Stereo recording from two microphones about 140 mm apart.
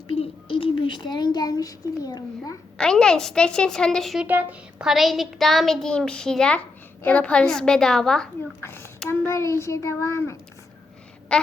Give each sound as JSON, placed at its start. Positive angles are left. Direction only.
{"t": 0.2, "sound": "a child's voice", "side_deg": 40}
{"t": 2.7, "sound": "a woman's voice", "side_deg": 5}
{"t": 4.3, "sound": "a woman's voice", "side_deg": -15}
{"t": 8.6, "sound": "a child's voice", "side_deg": 15}
{"t": 11.3, "sound": "duck", "side_deg": 5}